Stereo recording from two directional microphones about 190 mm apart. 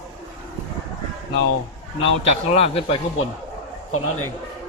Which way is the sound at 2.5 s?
35° left (ahead or behind).